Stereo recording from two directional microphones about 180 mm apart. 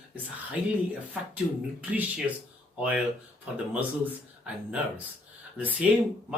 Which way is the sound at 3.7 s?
10° right (ahead or behind).